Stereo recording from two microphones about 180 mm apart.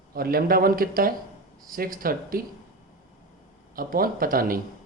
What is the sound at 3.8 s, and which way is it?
Speech, 55° right (ahead or behind).